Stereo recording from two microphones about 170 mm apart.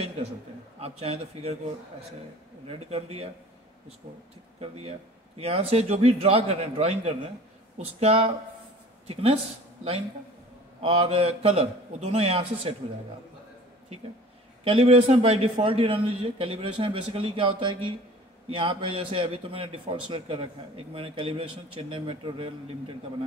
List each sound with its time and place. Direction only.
0.7 s a man's voice: 35° right (ahead or behind)
2.7 s a man's voice: 35° right (ahead or behind)
5.4 s a man's voice: 35° right (ahead or behind)
10.8 s a man's voice: 35° right (ahead or behind)
14.6 s a man's voice: 35° right (ahead or behind)